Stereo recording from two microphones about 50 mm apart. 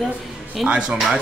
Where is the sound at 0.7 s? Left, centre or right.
Right.